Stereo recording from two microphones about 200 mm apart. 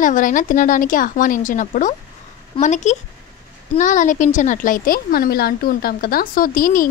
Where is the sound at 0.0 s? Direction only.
40° left (ahead or behind).